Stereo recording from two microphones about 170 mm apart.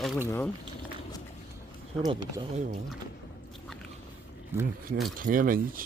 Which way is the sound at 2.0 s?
25° right (ahead or behind).